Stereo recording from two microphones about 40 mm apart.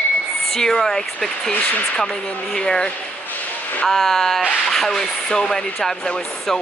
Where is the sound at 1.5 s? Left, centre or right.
Left.